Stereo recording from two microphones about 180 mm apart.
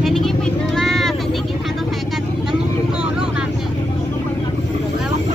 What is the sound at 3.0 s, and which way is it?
Vehicle, 5° right (ahead or behind).